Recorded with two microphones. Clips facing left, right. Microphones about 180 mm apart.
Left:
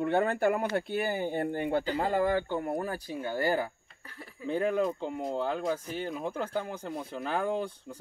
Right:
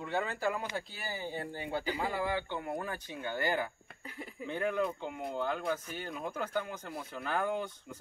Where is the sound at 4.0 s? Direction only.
15° right (ahead or behind).